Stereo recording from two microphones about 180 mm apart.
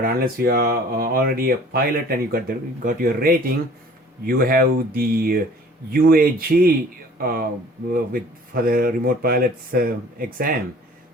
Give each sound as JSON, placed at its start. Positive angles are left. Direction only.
{"t": 0.0, "sound": "speech", "side_deg": -60}